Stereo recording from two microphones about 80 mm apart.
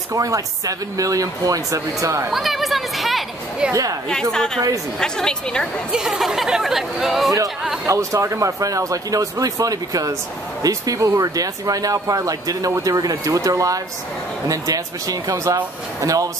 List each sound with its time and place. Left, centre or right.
0.1 s speech: right
2.3 s a woman's voice: centre
5.9 s speech: centre
7.8 s speech: right